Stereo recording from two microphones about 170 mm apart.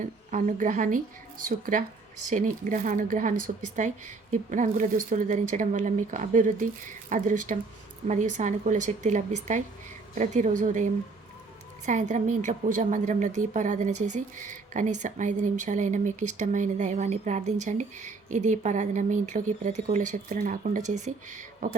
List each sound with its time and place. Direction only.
0.0 s a woman's voice: 45° right (ahead or behind)
11.9 s a woman's voice: 45° right (ahead or behind)